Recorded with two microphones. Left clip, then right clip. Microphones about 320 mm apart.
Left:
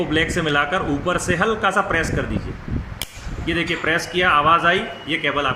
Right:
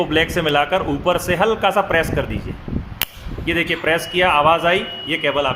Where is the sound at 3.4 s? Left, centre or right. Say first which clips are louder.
Right 3 dB; right.